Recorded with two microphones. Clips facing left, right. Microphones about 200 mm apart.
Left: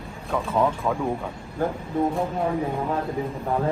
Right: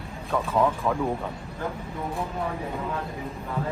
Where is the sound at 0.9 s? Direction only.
15° left (ahead or behind).